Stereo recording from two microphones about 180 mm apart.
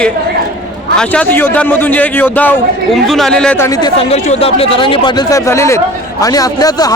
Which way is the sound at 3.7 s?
25° left (ahead or behind).